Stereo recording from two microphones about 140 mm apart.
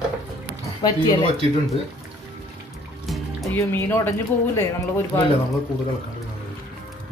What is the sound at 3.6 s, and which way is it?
Speech, 20° left (ahead or behind).